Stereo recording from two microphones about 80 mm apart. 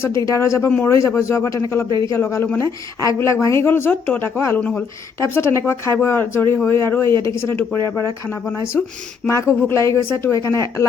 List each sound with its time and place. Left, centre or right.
0.0 s speech: left
1.9 s a man's voice: right
2.1 s speech: left
9.2 s speech: left